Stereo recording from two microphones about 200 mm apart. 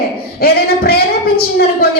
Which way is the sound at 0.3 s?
50° left (ahead or behind).